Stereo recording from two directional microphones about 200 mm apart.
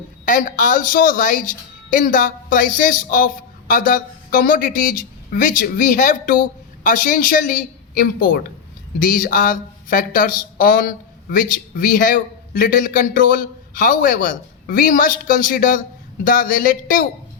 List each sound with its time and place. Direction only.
0.3 s speech: 40° left (ahead or behind)